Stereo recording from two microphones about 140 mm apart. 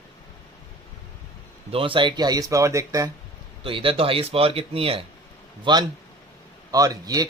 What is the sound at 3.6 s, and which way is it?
A man's voice, 40° right (ahead or behind).